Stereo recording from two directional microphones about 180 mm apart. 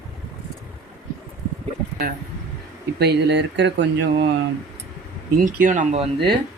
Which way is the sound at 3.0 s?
70° right (ahead or behind).